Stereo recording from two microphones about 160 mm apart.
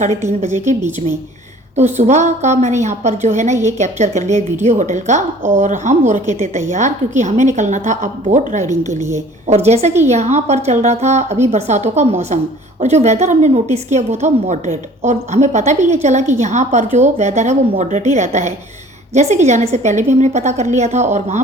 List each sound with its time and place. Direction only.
0.4 s a woman's voice: 50° right (ahead or behind)